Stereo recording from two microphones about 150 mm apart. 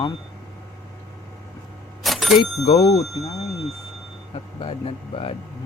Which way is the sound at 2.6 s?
40° left (ahead or behind).